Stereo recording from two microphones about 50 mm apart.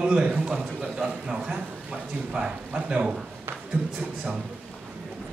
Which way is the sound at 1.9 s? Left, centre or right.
Right.